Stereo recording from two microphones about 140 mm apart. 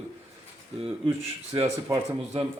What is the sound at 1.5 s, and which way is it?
Speech, 35° right (ahead or behind).